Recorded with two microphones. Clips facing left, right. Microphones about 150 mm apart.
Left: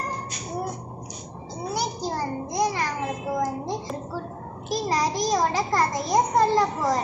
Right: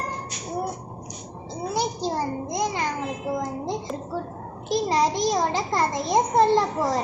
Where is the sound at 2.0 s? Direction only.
25° right (ahead or behind).